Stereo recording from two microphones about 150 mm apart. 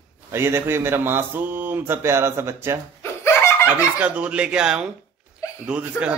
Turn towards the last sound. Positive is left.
turn(degrees=-10)  # may be behind; listen again after turning